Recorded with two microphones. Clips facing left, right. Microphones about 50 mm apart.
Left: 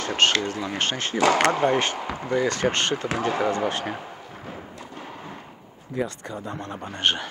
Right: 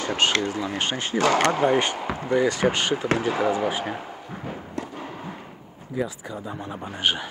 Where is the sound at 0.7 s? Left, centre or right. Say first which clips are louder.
Left 3 dB; centre.